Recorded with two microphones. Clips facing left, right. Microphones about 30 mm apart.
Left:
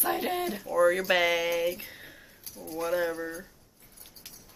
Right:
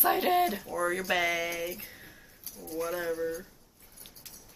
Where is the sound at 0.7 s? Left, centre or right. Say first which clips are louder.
Left 10 dB; centre.